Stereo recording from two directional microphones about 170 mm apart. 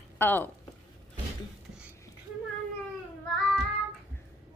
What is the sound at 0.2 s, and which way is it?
Speech, 10° left (ahead or behind).